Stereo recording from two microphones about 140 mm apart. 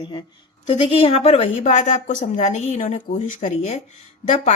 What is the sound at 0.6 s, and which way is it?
A woman's voice, 45° left (ahead or behind).